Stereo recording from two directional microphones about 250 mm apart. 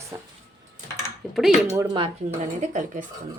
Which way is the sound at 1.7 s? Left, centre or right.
Centre.